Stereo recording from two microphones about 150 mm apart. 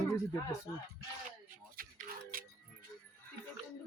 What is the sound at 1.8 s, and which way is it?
Music, 75° right (ahead or behind).